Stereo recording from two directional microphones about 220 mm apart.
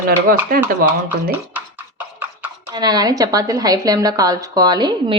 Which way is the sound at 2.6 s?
20° right (ahead or behind).